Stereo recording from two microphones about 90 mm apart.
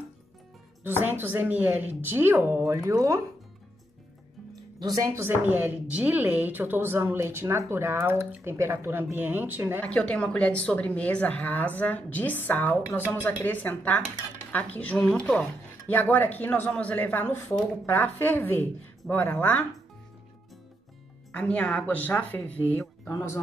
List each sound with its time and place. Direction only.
1.0 s a woman's voice: 20° right (ahead or behind)
4.7 s speech: 45° right (ahead or behind)
5.1 s a woman's voice: 25° right (ahead or behind)
9.8 s a woman's voice: 15° left (ahead or behind)
15.9 s speech: 20° left (ahead or behind)
21.3 s a woman's voice: 15° left (ahead or behind)
23.1 s speech: 30° left (ahead or behind)